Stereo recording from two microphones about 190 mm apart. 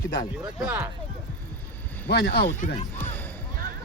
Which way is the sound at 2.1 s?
60° left (ahead or behind).